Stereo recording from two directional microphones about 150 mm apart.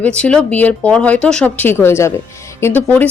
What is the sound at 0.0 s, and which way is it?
Speech, 5° left (ahead or behind).